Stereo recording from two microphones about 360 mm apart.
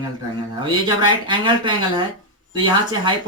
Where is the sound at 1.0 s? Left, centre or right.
Centre.